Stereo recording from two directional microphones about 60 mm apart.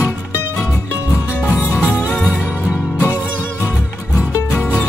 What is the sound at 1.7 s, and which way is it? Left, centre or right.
Music, centre.